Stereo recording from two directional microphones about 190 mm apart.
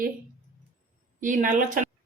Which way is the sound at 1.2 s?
40° right (ahead or behind).